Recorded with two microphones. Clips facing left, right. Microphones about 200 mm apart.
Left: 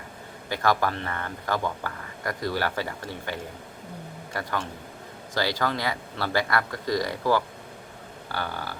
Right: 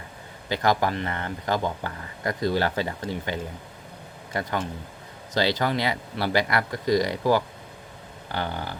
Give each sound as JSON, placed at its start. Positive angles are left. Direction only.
{"t": 0.4, "sound": "speech", "side_deg": -20}
{"t": 5.3, "sound": "speech", "side_deg": -20}